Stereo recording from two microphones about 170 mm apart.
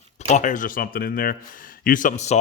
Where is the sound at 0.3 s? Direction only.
45° left (ahead or behind).